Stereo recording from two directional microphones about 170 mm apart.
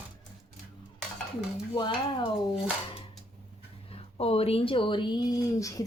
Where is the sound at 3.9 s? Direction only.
35° left (ahead or behind); by 5.8 s 20° left (ahead or behind).